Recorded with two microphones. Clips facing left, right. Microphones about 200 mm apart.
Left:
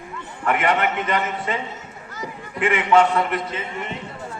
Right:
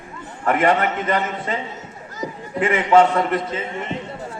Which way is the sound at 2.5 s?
40° right (ahead or behind).